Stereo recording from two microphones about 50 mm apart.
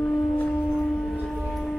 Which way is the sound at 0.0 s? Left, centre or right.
Left.